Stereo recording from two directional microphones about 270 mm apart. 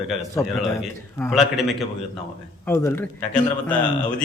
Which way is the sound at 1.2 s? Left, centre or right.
Centre.